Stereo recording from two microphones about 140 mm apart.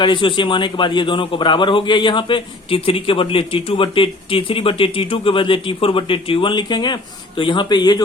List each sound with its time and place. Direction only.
0.0 s a man's voice: 35° left (ahead or behind)